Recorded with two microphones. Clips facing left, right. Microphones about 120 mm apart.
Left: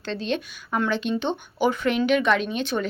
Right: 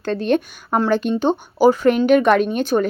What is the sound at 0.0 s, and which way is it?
A woman's voice, 50° right (ahead or behind).